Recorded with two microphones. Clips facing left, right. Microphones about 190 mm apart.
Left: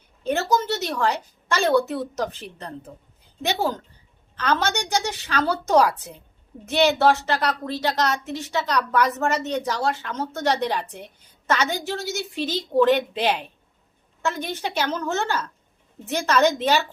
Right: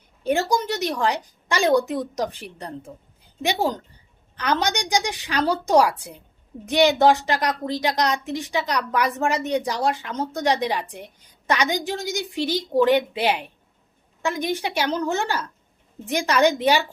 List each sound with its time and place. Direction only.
0.2 s a woman's voice: 15° right (ahead or behind)